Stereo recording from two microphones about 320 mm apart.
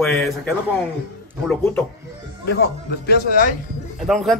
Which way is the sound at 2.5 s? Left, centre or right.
Left.